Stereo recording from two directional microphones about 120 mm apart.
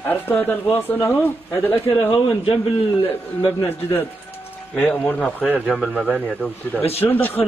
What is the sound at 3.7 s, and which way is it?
A man's voice, 15° left (ahead or behind).